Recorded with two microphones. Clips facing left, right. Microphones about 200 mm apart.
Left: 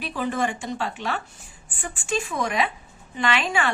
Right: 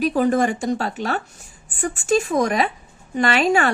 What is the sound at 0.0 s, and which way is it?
A woman's voice, 40° right (ahead or behind).